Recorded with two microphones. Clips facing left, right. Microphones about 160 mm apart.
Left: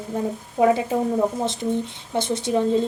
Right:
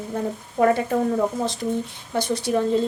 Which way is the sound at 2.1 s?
25° left (ahead or behind).